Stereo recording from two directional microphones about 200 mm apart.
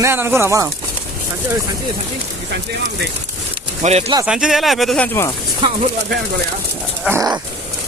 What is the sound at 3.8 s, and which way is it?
Speech, 30° right (ahead or behind).